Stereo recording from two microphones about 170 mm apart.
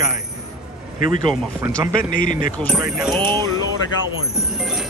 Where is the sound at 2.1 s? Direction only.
55° left (ahead or behind).